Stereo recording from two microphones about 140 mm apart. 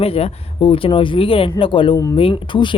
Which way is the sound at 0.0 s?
45° left (ahead or behind).